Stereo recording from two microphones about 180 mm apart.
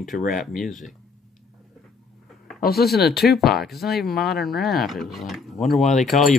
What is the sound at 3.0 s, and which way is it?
Speech, centre (ahead or behind).